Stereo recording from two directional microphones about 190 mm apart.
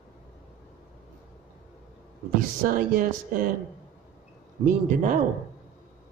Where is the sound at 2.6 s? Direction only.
45° right (ahead or behind).